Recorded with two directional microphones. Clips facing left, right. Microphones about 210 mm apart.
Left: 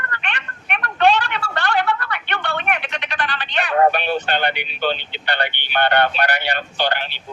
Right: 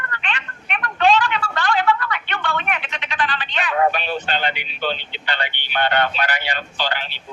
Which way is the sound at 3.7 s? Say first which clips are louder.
Left 3 dB; 50° left (ahead or behind).